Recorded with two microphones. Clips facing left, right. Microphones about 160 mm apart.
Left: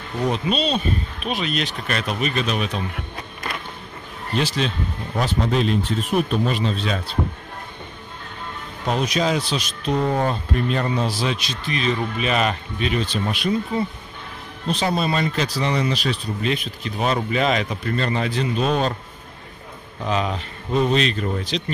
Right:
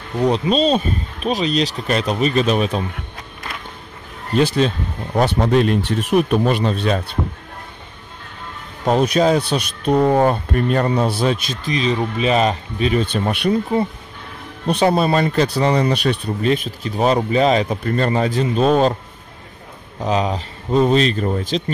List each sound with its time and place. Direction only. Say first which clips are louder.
0.3 s speech: right 6 dB; 40° right (ahead or behind)
4.4 s speech: right 7 dB; 45° right (ahead or behind)
5.2 s speech: right 5 dB; 55° right (ahead or behind)
8.8 s speech: right 6 dB; 50° right (ahead or behind)
11.6 s speech: right 3 dB; 35° right (ahead or behind)
13.0 s speech: right 4 dB; 55° right (ahead or behind)
14.7 s speech: right 6 dB; 55° right (ahead or behind)
16.4 s speech: right 6 dB; 40° right (ahead or behind)
20.0 s speech: right 4 dB; 35° right (ahead or behind)